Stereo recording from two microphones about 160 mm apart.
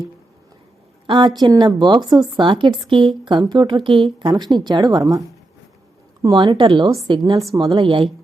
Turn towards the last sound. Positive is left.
turn(degrees=-20)  # may be behind; listen again after turning